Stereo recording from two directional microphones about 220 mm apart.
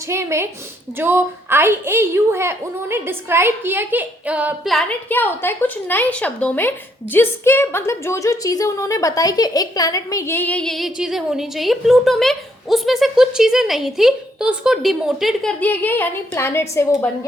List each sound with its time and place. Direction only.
0.1 s a woman's voice: 10° right (ahead or behind); by 17.1 s 10° left (ahead or behind)